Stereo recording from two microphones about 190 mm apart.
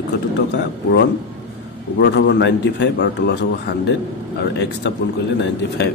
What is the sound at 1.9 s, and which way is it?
A man's voice, 65° left (ahead or behind).